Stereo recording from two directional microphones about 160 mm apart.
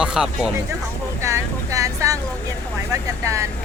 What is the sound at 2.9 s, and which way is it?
Speech, 20° right (ahead or behind).